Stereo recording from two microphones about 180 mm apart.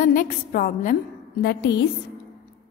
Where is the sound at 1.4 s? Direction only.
70° left (ahead or behind).